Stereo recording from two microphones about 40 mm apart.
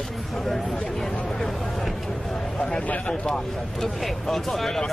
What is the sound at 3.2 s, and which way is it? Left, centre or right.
Speech, centre.